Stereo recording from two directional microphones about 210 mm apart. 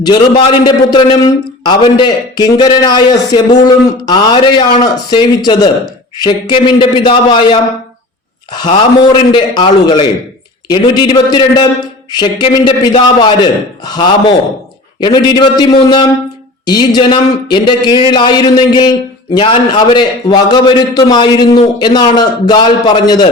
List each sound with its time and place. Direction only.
0.0 s a man's voice: 20° left (ahead or behind)